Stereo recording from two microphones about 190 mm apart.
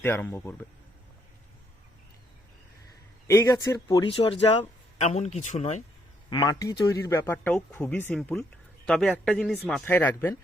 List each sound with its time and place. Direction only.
0.0 s speech: 10° left (ahead or behind)
3.2 s speech: 15° left (ahead or behind)
4.9 s speech: 35° left (ahead or behind)
6.3 s a man's voice: 20° left (ahead or behind)